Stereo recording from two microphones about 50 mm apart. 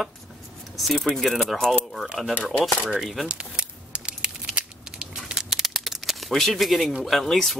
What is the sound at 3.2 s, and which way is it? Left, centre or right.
Crumpling, right.